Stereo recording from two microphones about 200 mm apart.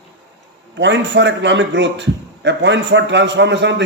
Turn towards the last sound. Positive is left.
turn(degrees=-60)  # may be behind; listen again after turning